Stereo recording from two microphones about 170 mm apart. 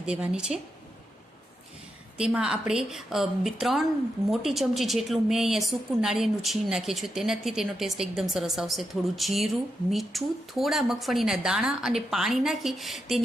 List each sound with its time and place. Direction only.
0.0 s a woman's voice: 5° right (ahead or behind)
2.1 s a woman's voice: 5° right (ahead or behind)